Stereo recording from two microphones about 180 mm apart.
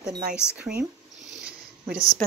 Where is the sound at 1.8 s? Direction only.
50° right (ahead or behind).